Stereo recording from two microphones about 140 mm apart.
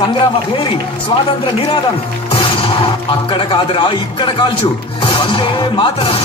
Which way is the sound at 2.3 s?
40° left (ahead or behind).